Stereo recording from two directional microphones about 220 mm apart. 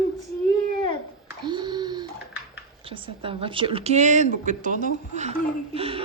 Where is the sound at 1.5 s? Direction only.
20° right (ahead or behind).